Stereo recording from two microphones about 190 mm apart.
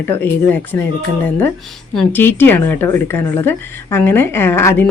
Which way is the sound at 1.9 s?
5° left (ahead or behind).